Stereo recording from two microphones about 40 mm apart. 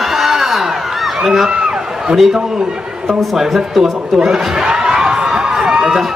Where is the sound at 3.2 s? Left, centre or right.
Centre.